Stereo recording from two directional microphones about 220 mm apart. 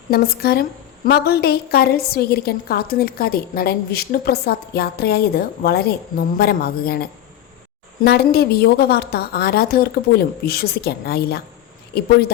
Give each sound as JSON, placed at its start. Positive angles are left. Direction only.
{"t": 0.1, "sound": "a woman's voice", "side_deg": 45}